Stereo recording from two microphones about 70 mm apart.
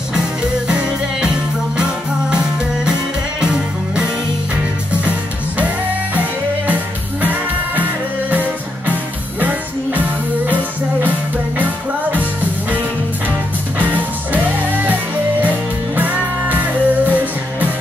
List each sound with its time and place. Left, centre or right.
0.7 s music: centre
6.7 s music: right
16.0 s music: right